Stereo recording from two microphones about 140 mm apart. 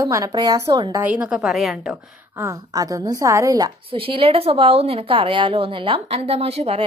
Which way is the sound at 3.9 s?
40° right (ahead or behind).